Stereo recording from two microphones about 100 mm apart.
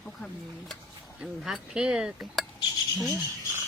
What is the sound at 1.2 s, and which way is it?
Speech, 5° right (ahead or behind).